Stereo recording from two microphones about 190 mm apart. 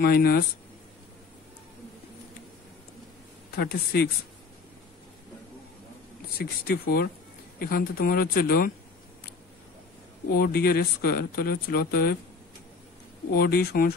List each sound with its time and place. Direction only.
0.0 s speech: 55° left (ahead or behind)
3.5 s speech: 55° left (ahead or behind)
6.3 s speech: 55° left (ahead or behind)
10.3 s speech: 55° left (ahead or behind)
13.3 s speech: 55° left (ahead or behind)